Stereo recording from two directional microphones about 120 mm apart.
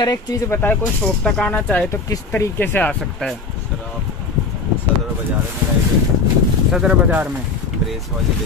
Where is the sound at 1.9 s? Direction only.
20° left (ahead or behind).